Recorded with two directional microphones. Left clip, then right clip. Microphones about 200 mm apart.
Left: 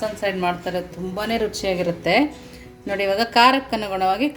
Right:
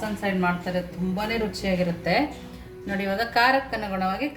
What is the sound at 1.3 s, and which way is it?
A woman's voice, 45° left (ahead or behind).